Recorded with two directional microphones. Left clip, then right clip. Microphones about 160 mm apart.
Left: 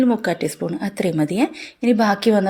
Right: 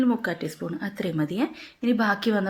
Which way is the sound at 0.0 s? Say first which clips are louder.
Left 7 dB; 35° left (ahead or behind).